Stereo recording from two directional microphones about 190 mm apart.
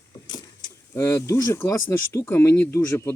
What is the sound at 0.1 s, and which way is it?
Vehicle, 20° left (ahead or behind).